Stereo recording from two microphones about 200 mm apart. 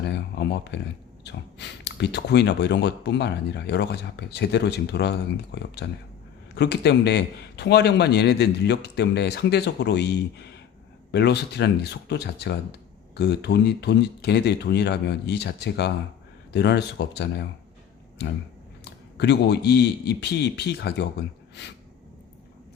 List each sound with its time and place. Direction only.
0.1 s speech: 60° left (ahead or behind)
18.9 s speech: 55° left (ahead or behind)